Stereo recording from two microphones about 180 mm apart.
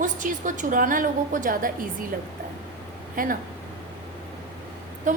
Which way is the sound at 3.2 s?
50° right (ahead or behind).